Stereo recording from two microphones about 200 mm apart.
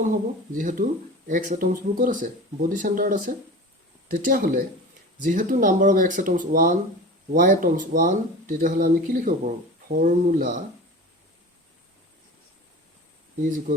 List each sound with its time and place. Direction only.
0.0 s speech: 40° right (ahead or behind)